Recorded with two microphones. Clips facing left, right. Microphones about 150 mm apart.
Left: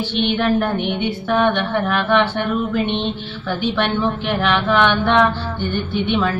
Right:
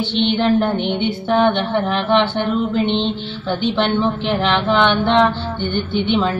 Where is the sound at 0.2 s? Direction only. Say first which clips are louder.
Right 2 dB; 25° right (ahead or behind).